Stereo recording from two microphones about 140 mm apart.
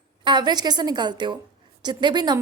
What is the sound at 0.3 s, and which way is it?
A woman's voice, 30° right (ahead or behind).